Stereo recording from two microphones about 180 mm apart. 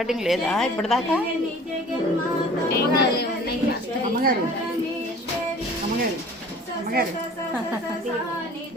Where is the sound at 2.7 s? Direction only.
60° left (ahead or behind).